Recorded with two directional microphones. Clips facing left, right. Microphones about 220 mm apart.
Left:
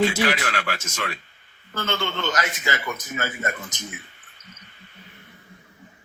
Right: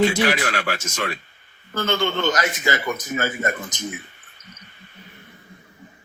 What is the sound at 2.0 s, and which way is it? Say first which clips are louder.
A man's voice: right 5 dB; 50° right (ahead or behind).